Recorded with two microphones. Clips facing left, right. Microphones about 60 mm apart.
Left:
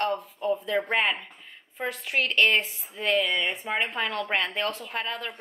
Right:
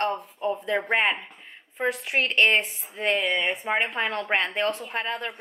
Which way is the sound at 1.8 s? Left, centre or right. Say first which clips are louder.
Right 3 dB; right.